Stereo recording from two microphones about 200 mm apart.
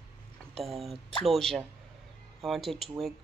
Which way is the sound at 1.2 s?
Centre (ahead or behind).